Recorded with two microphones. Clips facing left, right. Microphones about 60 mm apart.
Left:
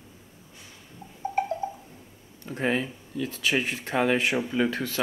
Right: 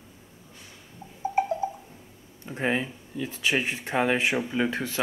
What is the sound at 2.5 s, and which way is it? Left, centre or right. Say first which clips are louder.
Speech: even; centre.